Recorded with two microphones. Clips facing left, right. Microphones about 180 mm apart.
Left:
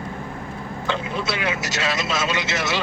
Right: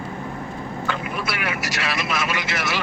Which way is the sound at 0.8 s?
20° left (ahead or behind).